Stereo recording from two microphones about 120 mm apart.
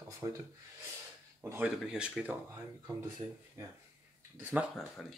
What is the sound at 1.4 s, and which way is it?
Speech, 15° right (ahead or behind).